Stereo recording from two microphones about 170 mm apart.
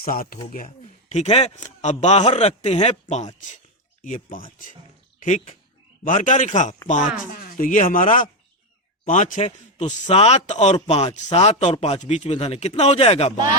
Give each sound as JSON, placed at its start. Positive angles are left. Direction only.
{"t": 0.0, "sound": "speech", "side_deg": 55}
{"t": 0.8, "sound": "a man's voice", "side_deg": 40}
{"t": 4.0, "sound": "a man's voice", "side_deg": 50}